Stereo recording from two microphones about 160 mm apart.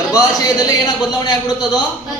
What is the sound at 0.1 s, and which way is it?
A man's voice, 25° left (ahead or behind).